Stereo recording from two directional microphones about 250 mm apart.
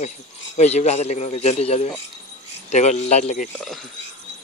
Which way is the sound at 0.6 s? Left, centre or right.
Left.